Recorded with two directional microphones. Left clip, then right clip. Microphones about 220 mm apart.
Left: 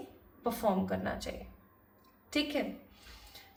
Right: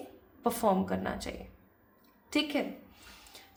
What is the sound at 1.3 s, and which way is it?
Speech, 30° right (ahead or behind).